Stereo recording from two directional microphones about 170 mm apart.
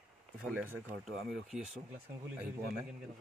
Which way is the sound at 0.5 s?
10° right (ahead or behind).